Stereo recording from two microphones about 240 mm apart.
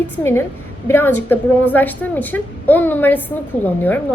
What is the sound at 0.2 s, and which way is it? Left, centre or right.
A woman's voice, centre.